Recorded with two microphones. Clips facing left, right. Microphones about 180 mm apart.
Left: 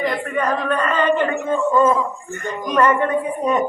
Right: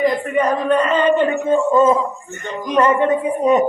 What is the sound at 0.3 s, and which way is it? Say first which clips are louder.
Speech: right 4 dB; 20° right (ahead or behind).